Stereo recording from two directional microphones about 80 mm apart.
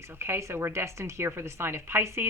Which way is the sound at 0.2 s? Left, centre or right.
Right.